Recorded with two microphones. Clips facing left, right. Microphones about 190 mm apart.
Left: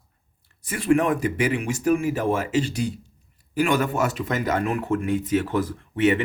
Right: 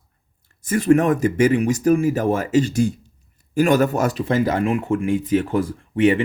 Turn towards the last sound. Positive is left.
turn(degrees=-30)  # may be behind; listen again after turning